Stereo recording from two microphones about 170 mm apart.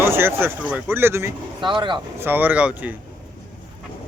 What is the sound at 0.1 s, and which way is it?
Speech, 15° right (ahead or behind).